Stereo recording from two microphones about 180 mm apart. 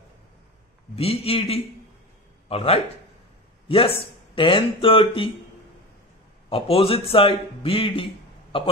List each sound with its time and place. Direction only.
0.9 s a man's voice: 35° left (ahead or behind)
6.5 s a man's voice: 30° left (ahead or behind)